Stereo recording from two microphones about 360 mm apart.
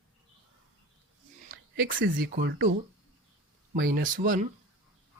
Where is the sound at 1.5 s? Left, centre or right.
Right.